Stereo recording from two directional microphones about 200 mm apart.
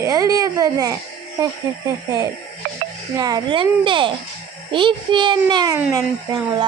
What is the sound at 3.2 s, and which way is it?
Speech, 20° right (ahead or behind).